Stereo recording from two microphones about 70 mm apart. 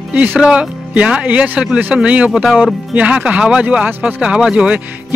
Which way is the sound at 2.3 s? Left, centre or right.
Centre.